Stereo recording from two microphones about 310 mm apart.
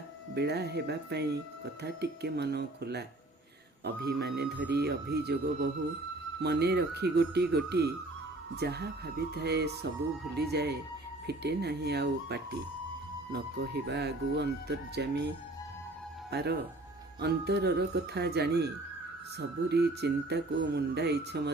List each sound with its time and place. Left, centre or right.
0.3 s speech: right
16.3 s speech: right